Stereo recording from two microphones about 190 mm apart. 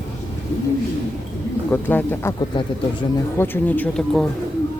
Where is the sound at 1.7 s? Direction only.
10° left (ahead or behind).